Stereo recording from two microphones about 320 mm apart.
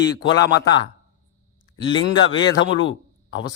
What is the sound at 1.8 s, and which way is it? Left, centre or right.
Speech, centre.